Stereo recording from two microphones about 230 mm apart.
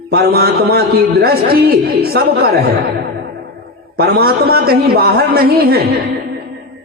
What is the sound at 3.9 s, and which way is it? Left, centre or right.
A man's voice, right.